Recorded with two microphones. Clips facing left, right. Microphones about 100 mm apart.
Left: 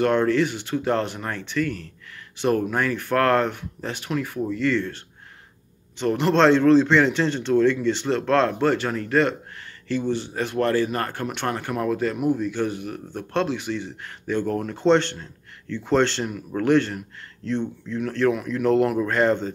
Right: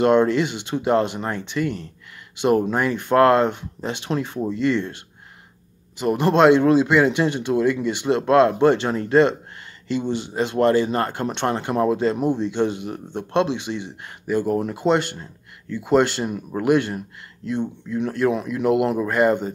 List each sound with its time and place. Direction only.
0.0 s a man's voice: 20° right (ahead or behind)
16.3 s a man's voice: 20° right (ahead or behind)